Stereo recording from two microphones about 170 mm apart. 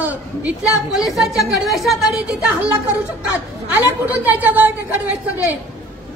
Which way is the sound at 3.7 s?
10° right (ahead or behind).